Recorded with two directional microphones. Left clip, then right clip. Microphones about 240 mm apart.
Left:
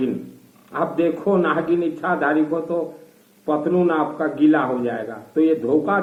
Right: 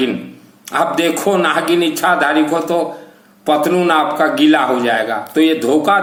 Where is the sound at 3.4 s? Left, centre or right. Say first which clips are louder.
Right 6 dB; right.